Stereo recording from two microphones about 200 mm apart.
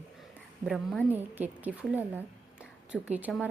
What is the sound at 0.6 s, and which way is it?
Speech, centre (ahead or behind).